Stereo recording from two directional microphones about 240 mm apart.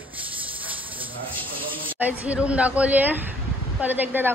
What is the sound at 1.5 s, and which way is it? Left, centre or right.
Speech, right.